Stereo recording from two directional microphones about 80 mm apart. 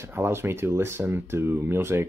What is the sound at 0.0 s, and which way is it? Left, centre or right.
Speech, right.